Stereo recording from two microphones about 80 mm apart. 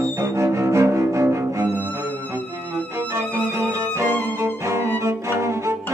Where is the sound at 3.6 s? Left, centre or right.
Right.